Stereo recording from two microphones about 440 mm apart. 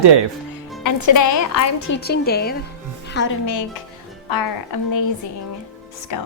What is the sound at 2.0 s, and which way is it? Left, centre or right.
A woman's voice, left.